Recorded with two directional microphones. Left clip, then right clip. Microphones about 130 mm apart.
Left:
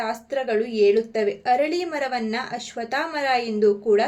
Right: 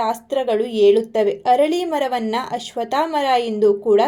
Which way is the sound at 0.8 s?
40° right (ahead or behind).